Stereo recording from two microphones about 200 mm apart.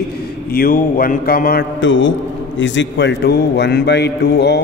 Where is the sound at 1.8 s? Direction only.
70° left (ahead or behind).